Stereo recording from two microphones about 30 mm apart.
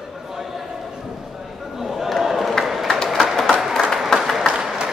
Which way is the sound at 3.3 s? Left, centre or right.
Centre.